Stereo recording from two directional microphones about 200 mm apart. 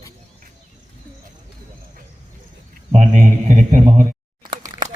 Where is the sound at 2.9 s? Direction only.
35° right (ahead or behind).